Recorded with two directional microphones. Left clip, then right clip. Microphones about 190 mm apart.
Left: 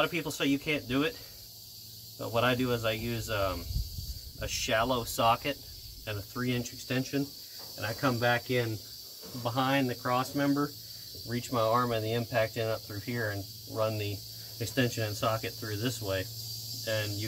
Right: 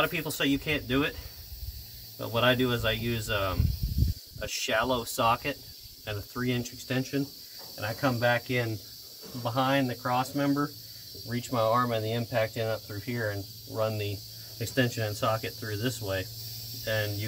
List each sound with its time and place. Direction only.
0.0 s speech: 35° right (ahead or behind)
2.1 s speech: 35° right (ahead or behind)
7.9 s speech: 15° right (ahead or behind); by 17.1 s 30° right (ahead or behind)